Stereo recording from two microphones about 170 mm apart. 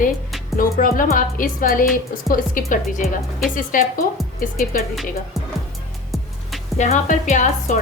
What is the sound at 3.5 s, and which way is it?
Speech, 50° left (ahead or behind).